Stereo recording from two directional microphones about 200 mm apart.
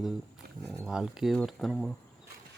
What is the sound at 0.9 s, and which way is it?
Speech, 5° right (ahead or behind).